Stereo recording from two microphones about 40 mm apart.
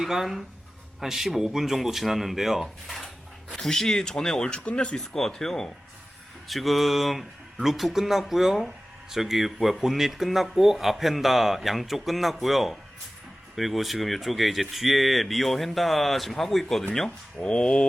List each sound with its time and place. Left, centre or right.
0.0 s speech: centre
3.6 s speech: centre
4.6 s a sound: left
4.9 s speech: centre
6.5 s speech: centre
17.4 s a sound: left